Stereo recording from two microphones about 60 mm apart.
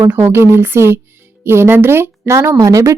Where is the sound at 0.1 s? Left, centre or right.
Right.